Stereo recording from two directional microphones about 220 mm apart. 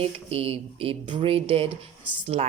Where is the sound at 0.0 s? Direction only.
25° right (ahead or behind).